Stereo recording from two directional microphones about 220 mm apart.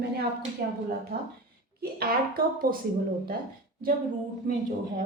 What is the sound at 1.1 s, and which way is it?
A woman's voice, 45° right (ahead or behind).